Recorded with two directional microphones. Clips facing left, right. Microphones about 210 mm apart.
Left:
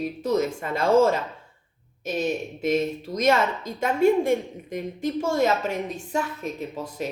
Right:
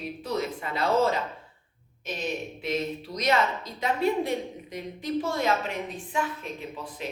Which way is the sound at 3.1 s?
45° left (ahead or behind).